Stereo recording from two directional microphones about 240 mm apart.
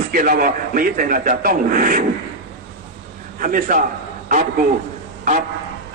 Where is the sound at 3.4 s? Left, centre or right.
Right.